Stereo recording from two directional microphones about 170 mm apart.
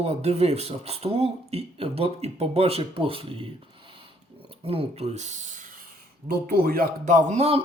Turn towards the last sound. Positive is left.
turn(degrees=-40)  # may be behind; listen again after turning